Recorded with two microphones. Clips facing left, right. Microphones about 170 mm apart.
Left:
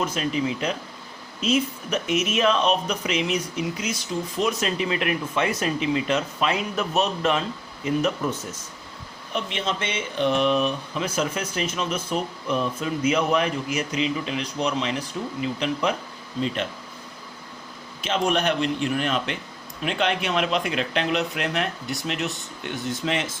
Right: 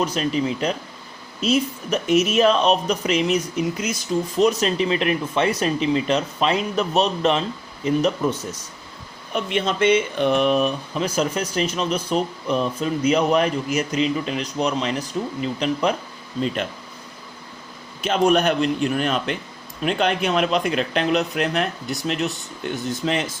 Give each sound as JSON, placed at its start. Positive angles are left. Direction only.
{"t": 0.0, "sound": "speech", "side_deg": -35}
{"t": 4.4, "sound": "speech", "side_deg": -35}
{"t": 9.3, "sound": "speech", "side_deg": -55}
{"t": 18.0, "sound": "a man's voice", "side_deg": -45}